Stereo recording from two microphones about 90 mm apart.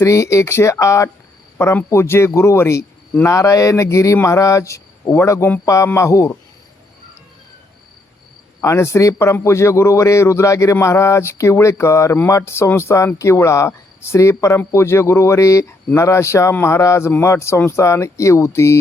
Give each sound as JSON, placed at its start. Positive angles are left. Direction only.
{"t": 0.0, "sound": "a man's voice", "side_deg": 35}
{"t": 8.6, "sound": "a man's voice", "side_deg": 30}